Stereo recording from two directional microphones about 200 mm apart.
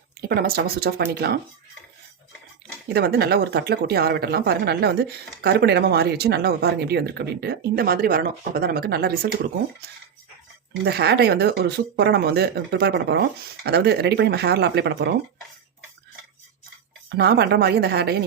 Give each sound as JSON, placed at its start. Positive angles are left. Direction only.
{"t": 0.2, "sound": "speech", "side_deg": -50}
{"t": 2.9, "sound": "speech", "side_deg": -55}
{"t": 10.8, "sound": "speech", "side_deg": -55}
{"t": 17.1, "sound": "speech", "side_deg": -50}